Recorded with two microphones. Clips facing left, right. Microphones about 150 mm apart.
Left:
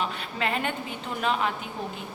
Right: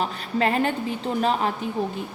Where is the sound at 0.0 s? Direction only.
40° right (ahead or behind).